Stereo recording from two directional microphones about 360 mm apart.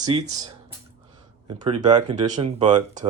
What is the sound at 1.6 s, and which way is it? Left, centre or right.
Speech, centre.